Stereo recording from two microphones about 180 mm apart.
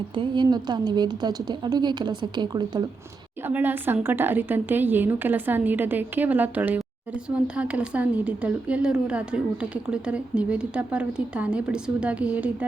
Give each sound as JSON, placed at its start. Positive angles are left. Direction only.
{"t": 0.1, "sound": "a woman's voice", "side_deg": -25}
{"t": 3.4, "sound": "a woman's voice", "side_deg": -10}